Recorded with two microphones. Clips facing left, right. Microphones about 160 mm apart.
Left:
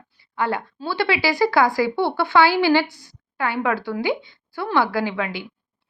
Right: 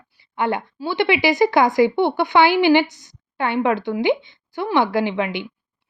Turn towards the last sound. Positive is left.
turn(degrees=-20)  # may be behind; listen again after turning